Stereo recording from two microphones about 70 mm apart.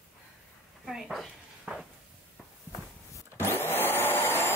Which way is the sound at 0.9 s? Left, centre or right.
Centre.